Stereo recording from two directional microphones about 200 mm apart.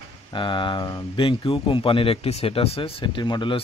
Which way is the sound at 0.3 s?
25° left (ahead or behind).